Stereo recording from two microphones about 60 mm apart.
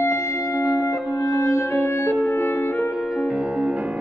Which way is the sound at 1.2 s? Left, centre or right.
Left.